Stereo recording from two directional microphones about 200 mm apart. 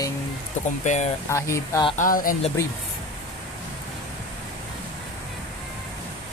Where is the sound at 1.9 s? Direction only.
45° left (ahead or behind).